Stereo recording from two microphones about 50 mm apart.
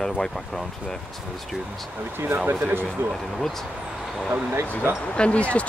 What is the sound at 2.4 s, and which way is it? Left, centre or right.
Speech, right.